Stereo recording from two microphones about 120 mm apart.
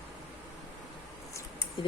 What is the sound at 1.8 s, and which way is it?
Speech, 45° left (ahead or behind).